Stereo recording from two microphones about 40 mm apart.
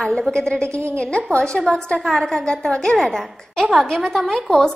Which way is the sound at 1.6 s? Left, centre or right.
Centre.